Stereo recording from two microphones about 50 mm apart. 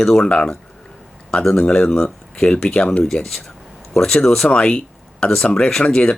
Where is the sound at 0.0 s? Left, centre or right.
Centre.